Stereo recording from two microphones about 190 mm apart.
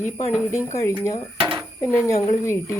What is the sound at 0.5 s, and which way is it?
Speech, 15° left (ahead or behind).